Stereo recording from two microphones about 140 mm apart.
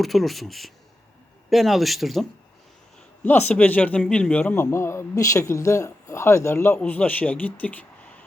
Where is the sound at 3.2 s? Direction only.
10° left (ahead or behind).